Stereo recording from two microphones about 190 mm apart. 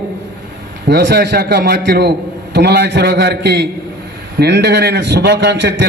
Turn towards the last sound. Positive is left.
turn(degrees=-65)  # may be behind; listen again after turning